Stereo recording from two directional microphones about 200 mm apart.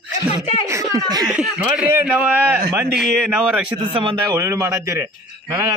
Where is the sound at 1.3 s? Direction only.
5° right (ahead or behind).